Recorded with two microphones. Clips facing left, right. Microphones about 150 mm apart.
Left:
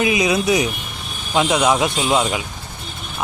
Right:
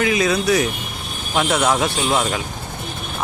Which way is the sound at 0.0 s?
20° left (ahead or behind).